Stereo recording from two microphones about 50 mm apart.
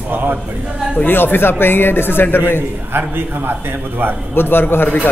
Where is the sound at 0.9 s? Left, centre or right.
Left.